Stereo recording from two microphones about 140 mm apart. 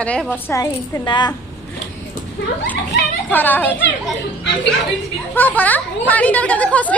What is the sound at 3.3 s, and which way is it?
Speech, 15° left (ahead or behind).